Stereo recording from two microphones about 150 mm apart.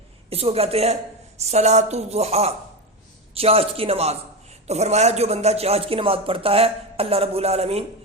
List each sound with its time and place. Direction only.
0.3 s speech: 40° right (ahead or behind)